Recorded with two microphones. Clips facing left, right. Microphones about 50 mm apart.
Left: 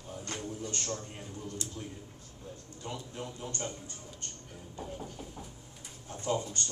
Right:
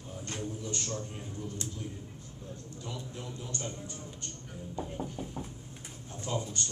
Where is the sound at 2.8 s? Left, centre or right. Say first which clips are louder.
Left 2 dB; left.